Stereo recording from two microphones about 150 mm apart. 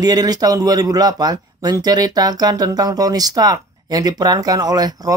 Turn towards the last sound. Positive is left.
turn(degrees=-25)  # may be behind; listen again after turning